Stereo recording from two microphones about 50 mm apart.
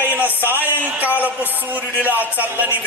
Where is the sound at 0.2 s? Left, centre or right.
Right.